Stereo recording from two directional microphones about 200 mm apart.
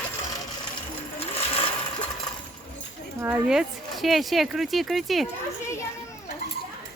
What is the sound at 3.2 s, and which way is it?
Speech, 5° right (ahead or behind).